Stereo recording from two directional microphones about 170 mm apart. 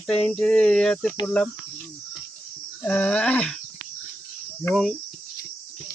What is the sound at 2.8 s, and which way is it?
Cricket, 10° left (ahead or behind).